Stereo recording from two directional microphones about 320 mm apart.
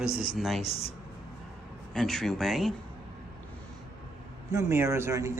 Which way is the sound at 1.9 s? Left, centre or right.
Centre.